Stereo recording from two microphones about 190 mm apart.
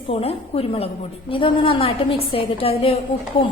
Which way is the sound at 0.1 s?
30° left (ahead or behind).